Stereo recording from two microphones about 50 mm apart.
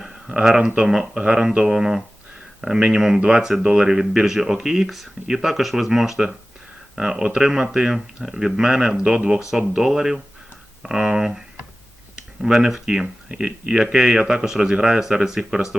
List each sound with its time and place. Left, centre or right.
0.0 s a sound: centre
0.8 s speech: centre
13.2 s speech: centre